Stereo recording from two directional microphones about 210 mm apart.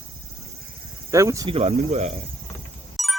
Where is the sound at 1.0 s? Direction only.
15° right (ahead or behind).